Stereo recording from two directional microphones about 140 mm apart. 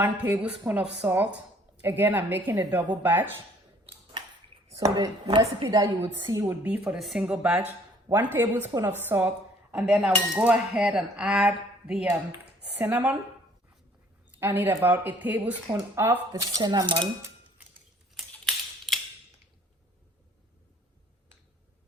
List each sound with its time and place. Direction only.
0.0 s speech: 15° right (ahead or behind)
4.7 s speech: 25° right (ahead or behind)
14.3 s speech: 15° right (ahead or behind); by 17.1 s 35° right (ahead or behind)
18.1 s camera: centre (ahead or behind)